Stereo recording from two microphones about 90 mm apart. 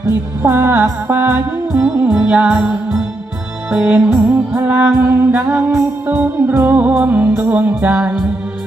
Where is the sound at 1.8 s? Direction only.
15° right (ahead or behind).